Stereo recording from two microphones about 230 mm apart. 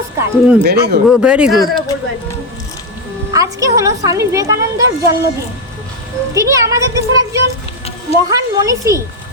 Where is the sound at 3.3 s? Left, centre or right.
Centre.